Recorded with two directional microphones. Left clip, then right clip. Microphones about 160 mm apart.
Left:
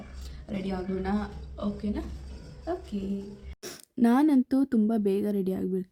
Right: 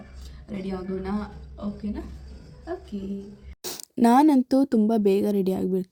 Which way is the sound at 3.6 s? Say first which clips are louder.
Right 5 dB; 20° right (ahead or behind).